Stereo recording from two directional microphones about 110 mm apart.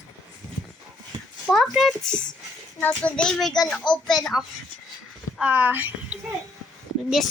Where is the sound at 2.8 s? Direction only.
15° left (ahead or behind).